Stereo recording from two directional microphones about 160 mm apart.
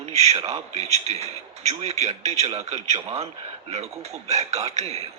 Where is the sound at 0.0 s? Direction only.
45° right (ahead or behind).